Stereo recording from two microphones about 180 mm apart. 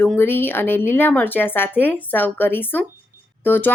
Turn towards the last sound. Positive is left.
turn(degrees=10)  # may be behind; listen again after turning